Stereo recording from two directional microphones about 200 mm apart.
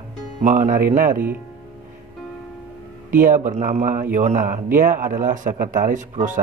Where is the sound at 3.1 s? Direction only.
40° right (ahead or behind).